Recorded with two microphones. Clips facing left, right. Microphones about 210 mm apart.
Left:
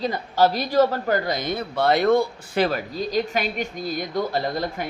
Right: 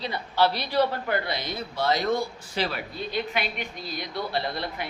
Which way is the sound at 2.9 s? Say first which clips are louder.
Left 5 dB; 40° left (ahead or behind).